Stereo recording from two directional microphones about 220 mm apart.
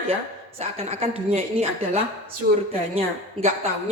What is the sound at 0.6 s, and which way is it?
A woman's voice, 30° right (ahead or behind).